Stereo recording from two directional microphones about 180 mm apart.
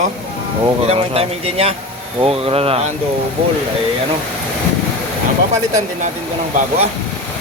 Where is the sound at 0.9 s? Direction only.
35° right (ahead or behind).